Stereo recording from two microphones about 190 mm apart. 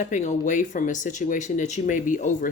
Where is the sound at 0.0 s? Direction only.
40° left (ahead or behind).